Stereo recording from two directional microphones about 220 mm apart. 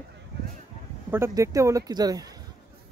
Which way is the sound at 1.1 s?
15° right (ahead or behind).